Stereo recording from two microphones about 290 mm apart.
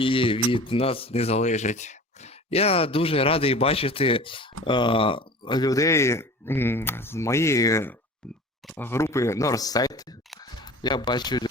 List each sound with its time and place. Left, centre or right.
0.0 s speech: centre